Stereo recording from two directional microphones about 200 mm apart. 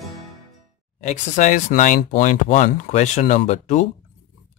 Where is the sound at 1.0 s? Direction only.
40° left (ahead or behind).